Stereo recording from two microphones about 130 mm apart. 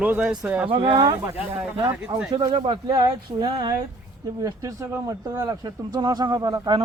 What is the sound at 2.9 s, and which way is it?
Speech, 30° right (ahead or behind).